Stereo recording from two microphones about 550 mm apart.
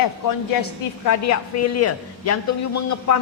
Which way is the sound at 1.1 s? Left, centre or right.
Left.